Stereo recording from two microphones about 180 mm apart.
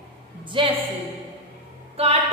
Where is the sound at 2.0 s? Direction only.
35° right (ahead or behind).